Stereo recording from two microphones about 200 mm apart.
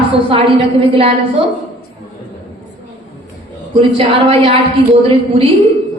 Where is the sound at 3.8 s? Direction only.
30° right (ahead or behind).